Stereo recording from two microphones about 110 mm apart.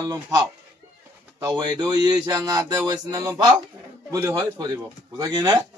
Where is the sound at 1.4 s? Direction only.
40° right (ahead or behind).